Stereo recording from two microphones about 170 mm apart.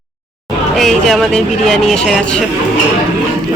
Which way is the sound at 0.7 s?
Centre (ahead or behind).